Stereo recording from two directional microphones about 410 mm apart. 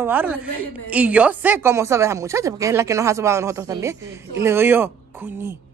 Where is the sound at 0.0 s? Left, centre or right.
Centre.